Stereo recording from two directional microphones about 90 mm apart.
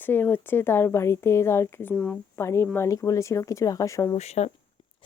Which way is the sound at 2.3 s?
30° left (ahead or behind).